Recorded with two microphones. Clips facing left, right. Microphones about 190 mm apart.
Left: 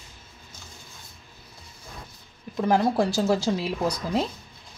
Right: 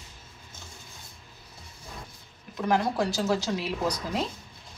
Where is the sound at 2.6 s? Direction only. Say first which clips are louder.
Left 4 dB; 30° left (ahead or behind).